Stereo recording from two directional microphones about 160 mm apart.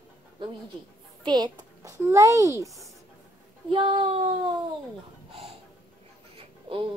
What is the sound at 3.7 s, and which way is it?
Speech, 35° right (ahead or behind).